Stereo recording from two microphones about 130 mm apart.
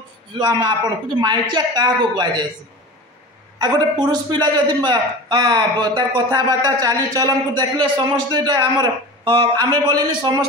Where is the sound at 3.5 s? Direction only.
30° right (ahead or behind).